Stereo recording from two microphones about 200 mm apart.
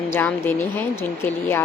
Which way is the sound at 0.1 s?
10° left (ahead or behind).